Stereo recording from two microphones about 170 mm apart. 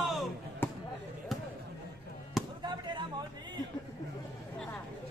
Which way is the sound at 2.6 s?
25° right (ahead or behind).